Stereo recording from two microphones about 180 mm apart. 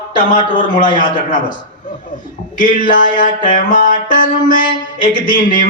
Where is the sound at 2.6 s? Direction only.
45° left (ahead or behind).